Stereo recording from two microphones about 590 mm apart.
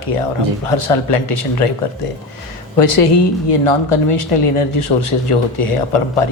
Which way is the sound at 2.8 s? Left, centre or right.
Left.